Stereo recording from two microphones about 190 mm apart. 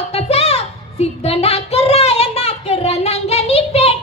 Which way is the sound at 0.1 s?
30° left (ahead or behind).